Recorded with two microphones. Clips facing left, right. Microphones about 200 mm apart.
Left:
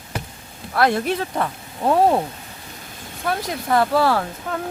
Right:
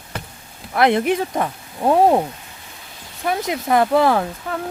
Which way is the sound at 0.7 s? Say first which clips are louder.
Right 3 dB; 20° right (ahead or behind).